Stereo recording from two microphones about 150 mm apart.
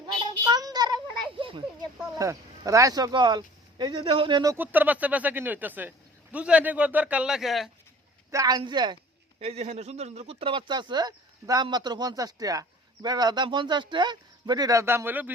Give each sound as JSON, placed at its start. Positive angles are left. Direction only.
{"t": 0.0, "sound": "a sound", "side_deg": -30}
{"t": 2.1, "sound": "speech", "side_deg": -25}
{"t": 4.5, "sound": "speech", "side_deg": -10}
{"t": 8.3, "sound": "speech", "side_deg": -25}
{"t": 9.4, "sound": "speech", "side_deg": -45}